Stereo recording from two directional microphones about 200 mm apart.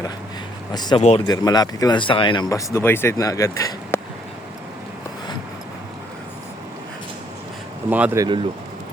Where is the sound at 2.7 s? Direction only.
10° left (ahead or behind).